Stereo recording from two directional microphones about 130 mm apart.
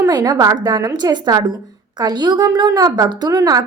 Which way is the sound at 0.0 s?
30° right (ahead or behind).